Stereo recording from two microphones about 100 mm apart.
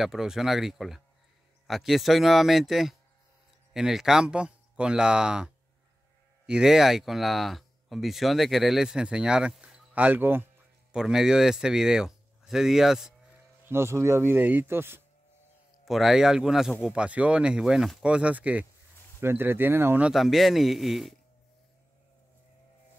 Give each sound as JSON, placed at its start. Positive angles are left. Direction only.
{"t": 0.0, "sound": "speech", "side_deg": -5}
{"t": 10.9, "sound": "speech", "side_deg": -5}
{"t": 13.7, "sound": "speech", "side_deg": -25}
{"t": 15.8, "sound": "speech", "side_deg": 0}
{"t": 18.0, "sound": "speech", "side_deg": -10}
{"t": 20.1, "sound": "speech", "side_deg": 0}